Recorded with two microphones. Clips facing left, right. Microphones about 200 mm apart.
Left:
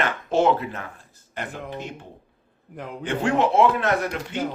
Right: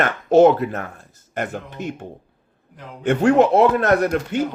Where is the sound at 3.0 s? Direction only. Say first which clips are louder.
Right 7 dB; 45° right (ahead or behind).